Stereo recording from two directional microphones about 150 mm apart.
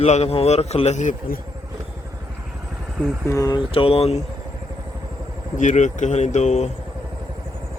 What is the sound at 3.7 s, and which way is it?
Speech, 40° left (ahead or behind).